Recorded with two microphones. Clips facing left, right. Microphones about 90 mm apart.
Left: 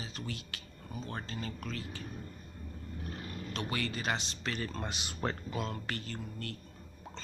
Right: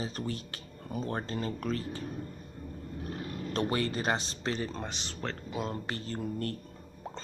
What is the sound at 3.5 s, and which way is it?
Speech, 35° right (ahead or behind).